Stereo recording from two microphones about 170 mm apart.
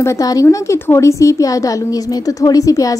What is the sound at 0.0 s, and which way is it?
A woman's voice, 20° left (ahead or behind).